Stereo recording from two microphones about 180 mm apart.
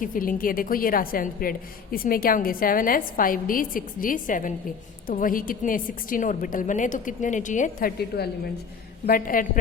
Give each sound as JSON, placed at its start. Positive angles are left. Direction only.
{"t": 0.0, "sound": "a woman's voice", "side_deg": 50}
{"t": 9.0, "sound": "a woman's voice", "side_deg": 50}